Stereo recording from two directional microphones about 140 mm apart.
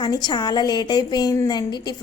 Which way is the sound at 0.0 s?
30° left (ahead or behind).